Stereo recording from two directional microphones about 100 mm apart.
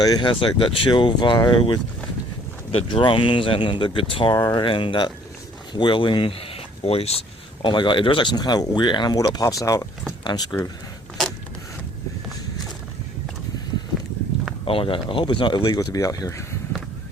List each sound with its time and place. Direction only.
0.0 s speech: 40° left (ahead or behind)
0.3 s speech: 55° left (ahead or behind)
2.7 s speech: 55° left (ahead or behind); by 7.7 s 90° left
7.7 s speech: 50° left (ahead or behind)
14.6 s speech: 65° left (ahead or behind); by 16.5 s 35° left (ahead or behind)